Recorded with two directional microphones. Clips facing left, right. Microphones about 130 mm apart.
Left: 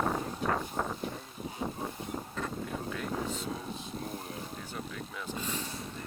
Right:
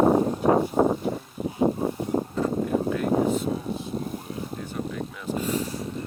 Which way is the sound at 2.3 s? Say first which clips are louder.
Right 12 dB; 35° right (ahead or behind).